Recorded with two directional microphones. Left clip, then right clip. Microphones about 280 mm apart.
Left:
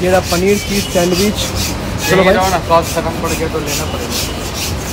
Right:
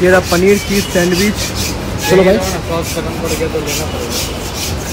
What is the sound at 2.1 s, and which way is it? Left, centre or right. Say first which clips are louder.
Speech: right 1 dB; left.